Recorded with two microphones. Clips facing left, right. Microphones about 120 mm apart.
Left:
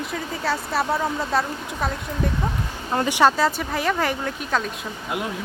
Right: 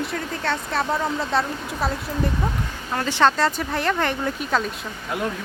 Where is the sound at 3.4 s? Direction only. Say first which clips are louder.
Even; centre (ahead or behind).